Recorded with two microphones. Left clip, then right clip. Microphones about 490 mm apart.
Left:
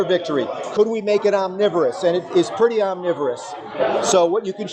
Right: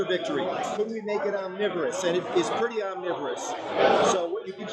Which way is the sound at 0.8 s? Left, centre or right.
Left.